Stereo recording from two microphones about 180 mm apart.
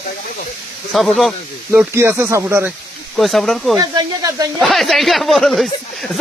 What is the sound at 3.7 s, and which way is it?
Speech, 20° right (ahead or behind).